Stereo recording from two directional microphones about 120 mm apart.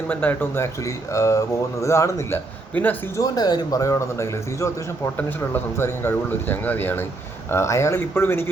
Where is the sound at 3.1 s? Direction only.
30° left (ahead or behind).